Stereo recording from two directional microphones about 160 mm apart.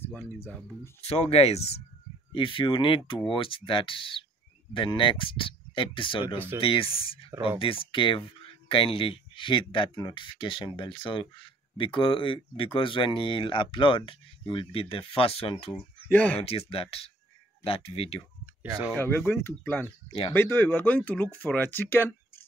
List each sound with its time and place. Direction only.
0.0 s speech: 10° left (ahead or behind)
1.0 s speech: 40° left (ahead or behind)
6.2 s speech: 15° right (ahead or behind)
6.6 s speech: 35° left (ahead or behind)
15.7 s speech: 10° left (ahead or behind)
16.3 s speech: 40° left (ahead or behind)
18.9 s speech: 10° left (ahead or behind)
20.1 s speech: 35° left (ahead or behind)
20.3 s speech: 15° left (ahead or behind)